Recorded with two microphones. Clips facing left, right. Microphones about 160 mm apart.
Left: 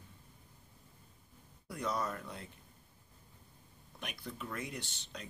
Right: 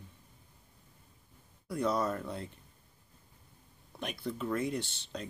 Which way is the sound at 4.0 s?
30° right (ahead or behind).